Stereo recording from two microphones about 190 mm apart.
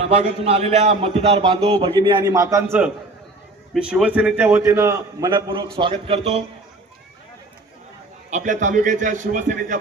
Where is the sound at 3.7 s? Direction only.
5° right (ahead or behind); by 6.4 s 30° right (ahead or behind).